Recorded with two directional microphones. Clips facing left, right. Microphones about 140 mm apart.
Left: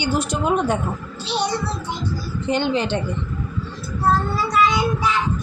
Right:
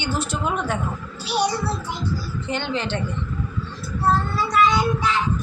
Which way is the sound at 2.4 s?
15° left (ahead or behind).